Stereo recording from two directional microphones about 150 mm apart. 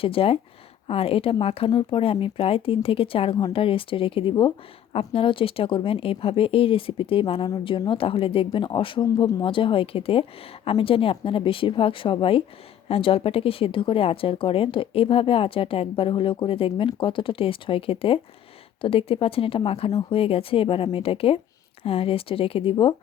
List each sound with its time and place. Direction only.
0.0 s speech: 40° left (ahead or behind)